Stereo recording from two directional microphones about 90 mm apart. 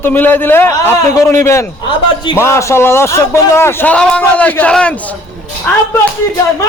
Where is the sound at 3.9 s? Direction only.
10° left (ahead or behind).